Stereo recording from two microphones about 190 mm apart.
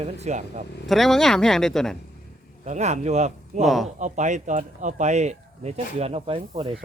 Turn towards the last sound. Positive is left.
turn(degrees=-30)  # may be behind; listen again after turning